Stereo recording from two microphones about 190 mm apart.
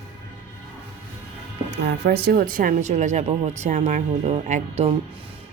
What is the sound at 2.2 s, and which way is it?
Speech, 50° right (ahead or behind).